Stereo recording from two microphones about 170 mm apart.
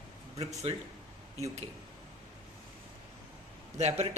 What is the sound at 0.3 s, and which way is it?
Speech, 35° right (ahead or behind).